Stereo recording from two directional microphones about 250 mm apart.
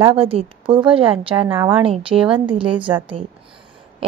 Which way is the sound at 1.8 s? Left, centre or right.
Right.